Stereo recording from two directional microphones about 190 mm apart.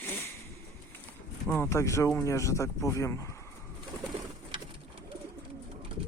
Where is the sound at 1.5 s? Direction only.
15° left (ahead or behind).